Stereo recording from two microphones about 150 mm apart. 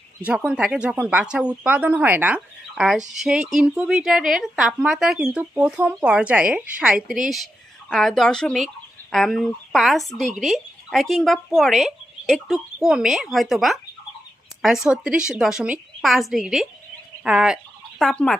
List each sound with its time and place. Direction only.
0.5 s speech: 5° right (ahead or behind)